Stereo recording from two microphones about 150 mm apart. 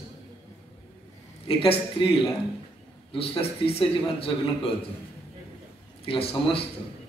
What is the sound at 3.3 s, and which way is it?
A man's voice, 40° left (ahead or behind).